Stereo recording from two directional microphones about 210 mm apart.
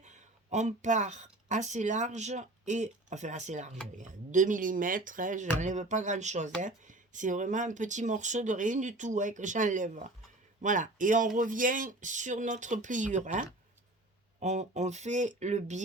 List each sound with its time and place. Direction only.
0.0 s speech: 35° right (ahead or behind)